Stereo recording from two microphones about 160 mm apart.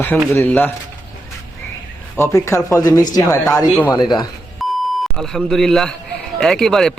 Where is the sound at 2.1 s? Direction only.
15° left (ahead or behind).